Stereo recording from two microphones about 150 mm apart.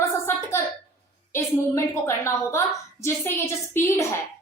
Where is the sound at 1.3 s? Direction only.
20° left (ahead or behind).